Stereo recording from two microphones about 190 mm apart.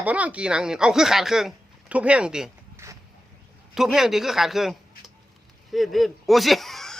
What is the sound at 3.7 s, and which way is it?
Speech, centre (ahead or behind).